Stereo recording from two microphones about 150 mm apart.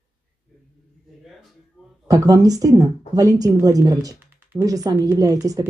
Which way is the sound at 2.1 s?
25° right (ahead or behind).